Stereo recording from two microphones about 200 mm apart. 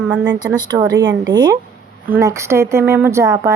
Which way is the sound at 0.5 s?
20° right (ahead or behind).